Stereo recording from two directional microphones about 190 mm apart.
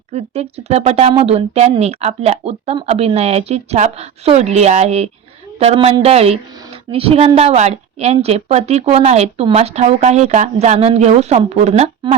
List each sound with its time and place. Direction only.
0.1 s a woman's voice: 35° right (ahead or behind)